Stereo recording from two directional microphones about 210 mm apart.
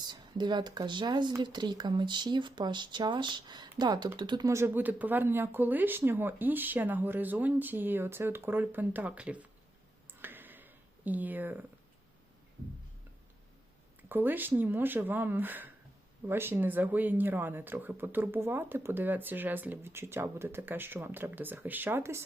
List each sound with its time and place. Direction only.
0.1 s speech: 20° right (ahead or behind)
10.2 s a sound: 10° right (ahead or behind)
14.1 s speech: 10° right (ahead or behind)